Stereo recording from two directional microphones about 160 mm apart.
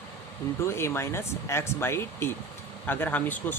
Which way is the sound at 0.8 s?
15° left (ahead or behind).